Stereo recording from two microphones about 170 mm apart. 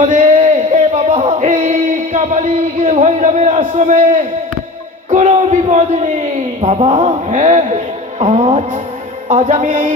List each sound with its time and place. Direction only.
0.0 s music: 45° right (ahead or behind)
5.1 s a man's voice: 40° right (ahead or behind)